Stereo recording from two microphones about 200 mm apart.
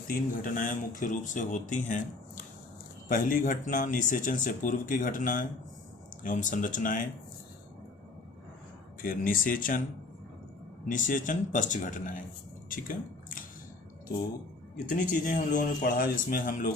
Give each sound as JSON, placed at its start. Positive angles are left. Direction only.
{"t": 0.1, "sound": "speech", "side_deg": 45}
{"t": 9.0, "sound": "speech", "side_deg": 45}
{"t": 10.8, "sound": "speech", "side_deg": 40}
{"t": 15.3, "sound": "speech", "side_deg": 40}